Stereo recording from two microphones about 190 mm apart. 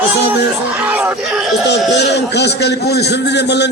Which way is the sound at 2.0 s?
65° left (ahead or behind).